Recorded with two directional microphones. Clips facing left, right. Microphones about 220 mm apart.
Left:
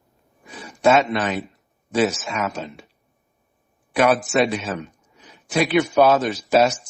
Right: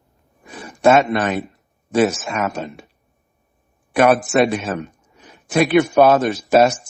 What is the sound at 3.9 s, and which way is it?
A man's voice, 55° right (ahead or behind).